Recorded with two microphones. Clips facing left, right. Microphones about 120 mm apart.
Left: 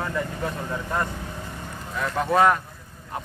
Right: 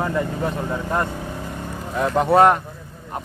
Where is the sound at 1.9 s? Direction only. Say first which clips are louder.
Right 6 dB; 35° right (ahead or behind).